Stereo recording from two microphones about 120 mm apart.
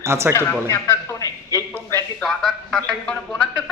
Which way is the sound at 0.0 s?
20° right (ahead or behind).